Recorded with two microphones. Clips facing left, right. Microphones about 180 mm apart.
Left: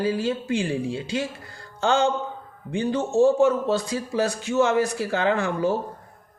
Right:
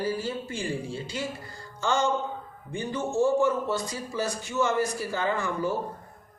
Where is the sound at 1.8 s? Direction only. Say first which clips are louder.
Left 4 dB; 70° left (ahead or behind).